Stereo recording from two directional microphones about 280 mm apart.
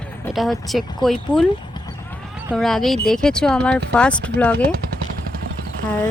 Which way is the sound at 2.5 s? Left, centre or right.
Centre.